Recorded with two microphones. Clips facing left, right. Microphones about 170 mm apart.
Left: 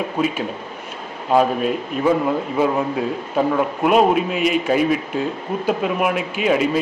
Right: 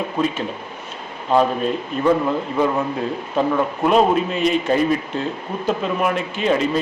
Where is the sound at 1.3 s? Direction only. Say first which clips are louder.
Left 1 dB; 5° left (ahead or behind).